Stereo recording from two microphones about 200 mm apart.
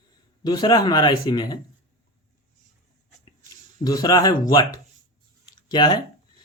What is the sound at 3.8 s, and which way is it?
Speech, 20° left (ahead or behind).